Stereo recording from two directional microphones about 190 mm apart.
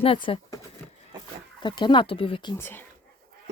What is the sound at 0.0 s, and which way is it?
Speech, 30° left (ahead or behind).